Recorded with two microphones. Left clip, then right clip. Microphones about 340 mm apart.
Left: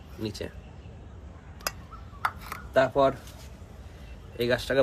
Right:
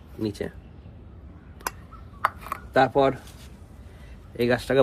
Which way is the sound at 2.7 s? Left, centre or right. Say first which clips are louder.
Right 2 dB; centre.